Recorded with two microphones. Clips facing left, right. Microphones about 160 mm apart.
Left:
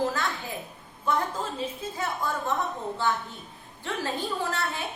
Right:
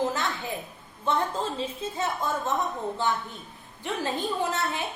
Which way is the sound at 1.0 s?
25° right (ahead or behind).